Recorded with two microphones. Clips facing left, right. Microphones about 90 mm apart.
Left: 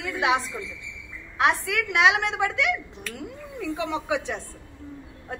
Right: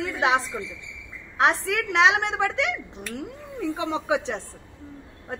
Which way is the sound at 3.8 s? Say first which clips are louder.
Right 2 dB; 25° right (ahead or behind).